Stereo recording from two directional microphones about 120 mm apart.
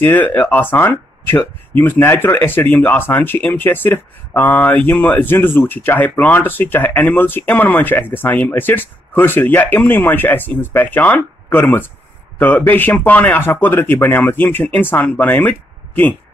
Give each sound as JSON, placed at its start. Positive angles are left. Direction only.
{"t": 0.0, "sound": "speech", "side_deg": 15}